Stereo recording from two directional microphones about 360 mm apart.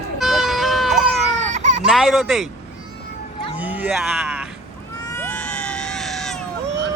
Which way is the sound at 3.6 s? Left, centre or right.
Centre.